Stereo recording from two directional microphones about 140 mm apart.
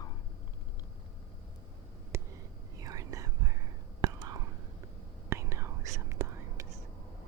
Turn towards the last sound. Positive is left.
turn(degrees=-20)  # may be behind; listen again after turning